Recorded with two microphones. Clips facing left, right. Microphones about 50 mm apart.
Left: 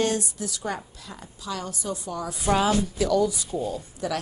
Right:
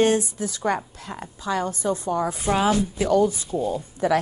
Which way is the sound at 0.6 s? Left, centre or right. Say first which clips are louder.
Right 10 dB; right.